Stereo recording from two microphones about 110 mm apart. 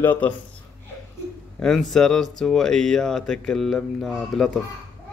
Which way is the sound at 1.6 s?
5° left (ahead or behind).